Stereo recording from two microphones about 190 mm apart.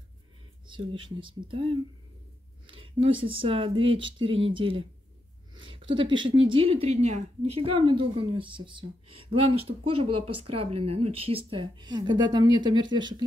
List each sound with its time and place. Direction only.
0.7 s a woman's voice: 25° right (ahead or behind)